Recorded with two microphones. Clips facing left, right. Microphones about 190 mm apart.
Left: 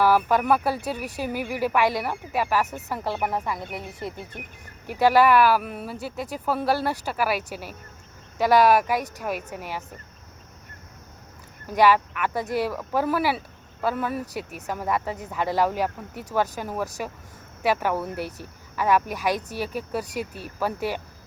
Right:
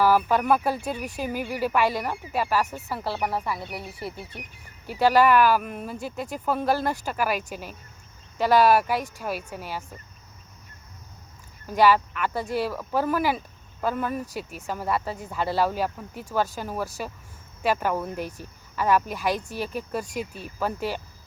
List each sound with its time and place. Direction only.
0.1 s speech: 10° left (ahead or behind)
11.7 s speech: 10° left (ahead or behind)